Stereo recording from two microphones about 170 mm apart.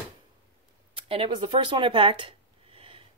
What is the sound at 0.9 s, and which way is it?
Speech, 30° right (ahead or behind).